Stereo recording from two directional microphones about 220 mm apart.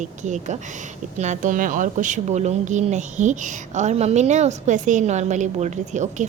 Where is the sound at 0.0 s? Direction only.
35° right (ahead or behind).